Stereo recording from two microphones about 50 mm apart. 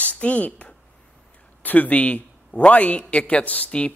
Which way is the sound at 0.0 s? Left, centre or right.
Left.